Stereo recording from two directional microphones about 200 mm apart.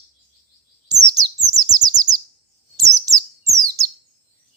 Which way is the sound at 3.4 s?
15° right (ahead or behind).